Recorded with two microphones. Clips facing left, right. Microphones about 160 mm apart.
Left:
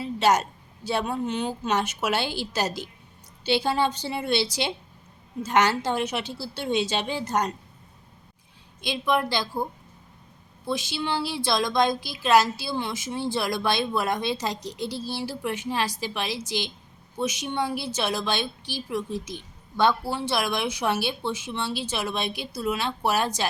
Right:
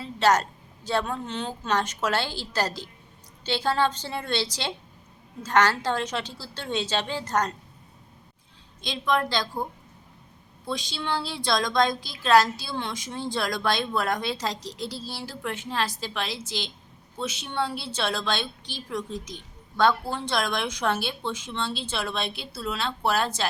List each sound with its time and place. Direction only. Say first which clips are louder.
0.0 s a sound: even; 15° left (ahead or behind)
0.9 s speech: left 1 dB; 10° left (ahead or behind)
8.8 s speech: left 1 dB; 10° left (ahead or behind)
10.7 s speech: left 2 dB; 10° left (ahead or behind)